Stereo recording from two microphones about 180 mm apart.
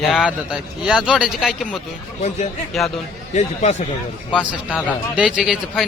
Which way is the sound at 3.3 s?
40° left (ahead or behind).